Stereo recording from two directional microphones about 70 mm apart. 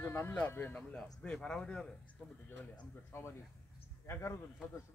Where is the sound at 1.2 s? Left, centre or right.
Centre.